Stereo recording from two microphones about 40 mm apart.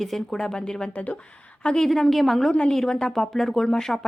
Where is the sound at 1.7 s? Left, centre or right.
Centre.